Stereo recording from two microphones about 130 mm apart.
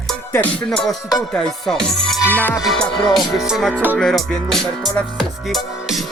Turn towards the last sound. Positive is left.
turn(degrees=0)  # may be behind; listen again after turning